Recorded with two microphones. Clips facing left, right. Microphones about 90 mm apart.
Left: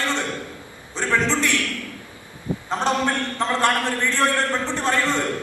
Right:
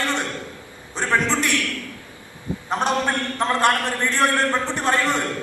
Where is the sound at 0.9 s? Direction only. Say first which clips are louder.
Right 1 dB; 20° right (ahead or behind).